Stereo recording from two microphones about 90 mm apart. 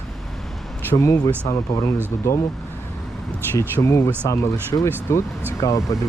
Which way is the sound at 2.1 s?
25° left (ahead or behind).